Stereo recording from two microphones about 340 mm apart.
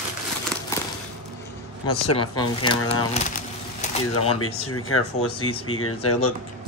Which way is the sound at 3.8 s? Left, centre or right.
Left.